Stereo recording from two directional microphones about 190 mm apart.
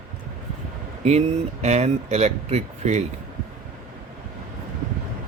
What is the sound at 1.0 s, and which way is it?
Speech, 35° right (ahead or behind).